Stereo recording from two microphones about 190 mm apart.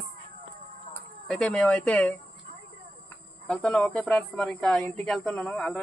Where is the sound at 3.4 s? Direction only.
5° left (ahead or behind).